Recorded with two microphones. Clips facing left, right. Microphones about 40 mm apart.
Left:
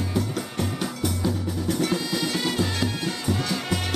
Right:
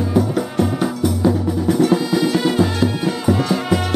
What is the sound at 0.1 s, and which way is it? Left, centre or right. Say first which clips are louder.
Music: right 9 dB; centre.